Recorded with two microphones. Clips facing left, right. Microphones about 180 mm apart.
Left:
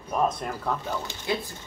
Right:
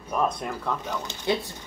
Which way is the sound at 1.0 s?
20° right (ahead or behind).